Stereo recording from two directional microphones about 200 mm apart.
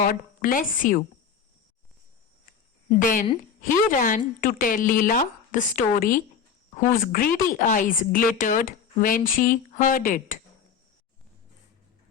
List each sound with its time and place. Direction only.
0.0 s speech: 45° left (ahead or behind)
3.0 s a woman's voice: 45° left (ahead or behind)